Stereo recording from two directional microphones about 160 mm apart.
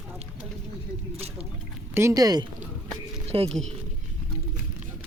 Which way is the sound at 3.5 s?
5° left (ahead or behind).